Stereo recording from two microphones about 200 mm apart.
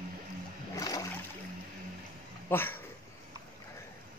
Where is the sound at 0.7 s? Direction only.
15° left (ahead or behind).